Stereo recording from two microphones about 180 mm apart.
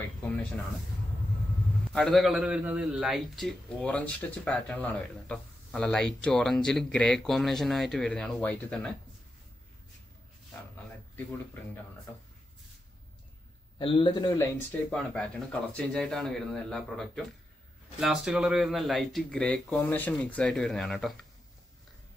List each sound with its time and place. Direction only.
1.9 s a man's voice: centre (ahead or behind)
13.7 s a man's voice: 25° left (ahead or behind)
14.7 s a man's voice: 5° left (ahead or behind)